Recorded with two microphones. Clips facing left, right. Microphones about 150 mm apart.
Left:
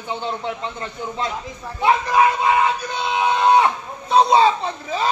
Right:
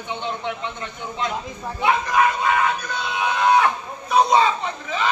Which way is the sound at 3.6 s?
25° left (ahead or behind).